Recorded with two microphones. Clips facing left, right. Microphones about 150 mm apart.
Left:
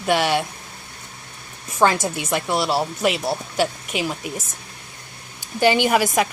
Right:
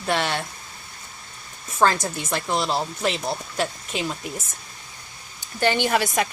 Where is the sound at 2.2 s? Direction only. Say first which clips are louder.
Left 3 dB; 10° left (ahead or behind).